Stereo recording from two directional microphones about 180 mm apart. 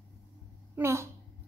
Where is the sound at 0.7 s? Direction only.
15° right (ahead or behind).